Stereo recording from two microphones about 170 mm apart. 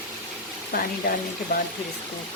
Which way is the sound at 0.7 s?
60° left (ahead or behind).